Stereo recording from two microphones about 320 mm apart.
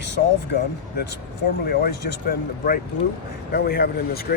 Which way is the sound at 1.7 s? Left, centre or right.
Left.